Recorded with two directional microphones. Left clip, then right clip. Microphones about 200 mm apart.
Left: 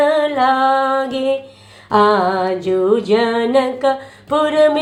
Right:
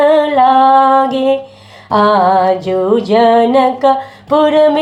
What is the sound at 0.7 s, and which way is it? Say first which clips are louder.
Music: right 8 dB; 35° left (ahead or behind).